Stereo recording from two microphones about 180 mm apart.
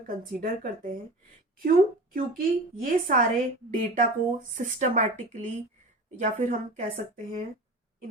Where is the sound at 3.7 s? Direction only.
50° right (ahead or behind).